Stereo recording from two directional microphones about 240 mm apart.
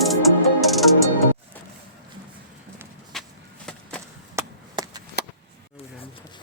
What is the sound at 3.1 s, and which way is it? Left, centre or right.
Vehicle, centre.